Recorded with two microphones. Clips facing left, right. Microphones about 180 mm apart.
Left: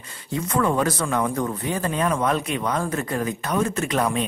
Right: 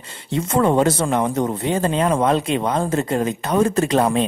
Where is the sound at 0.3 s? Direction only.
25° right (ahead or behind).